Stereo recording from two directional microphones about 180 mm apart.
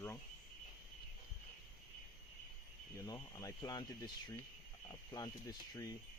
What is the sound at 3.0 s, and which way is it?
Speech, 20° left (ahead or behind).